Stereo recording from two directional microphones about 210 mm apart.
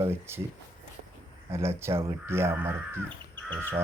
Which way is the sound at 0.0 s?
10° right (ahead or behind).